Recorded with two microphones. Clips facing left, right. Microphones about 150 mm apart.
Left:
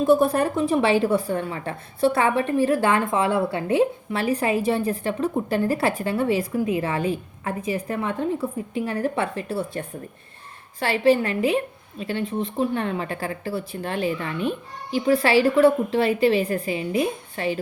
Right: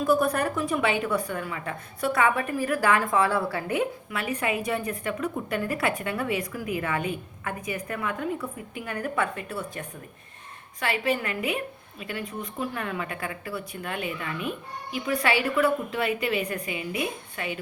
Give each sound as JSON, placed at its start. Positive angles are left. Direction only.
{"t": 0.0, "sound": "a woman's voice", "side_deg": 25}